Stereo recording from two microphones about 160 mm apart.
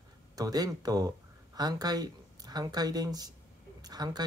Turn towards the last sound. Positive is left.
turn(degrees=-25)  # may be behind; listen again after turning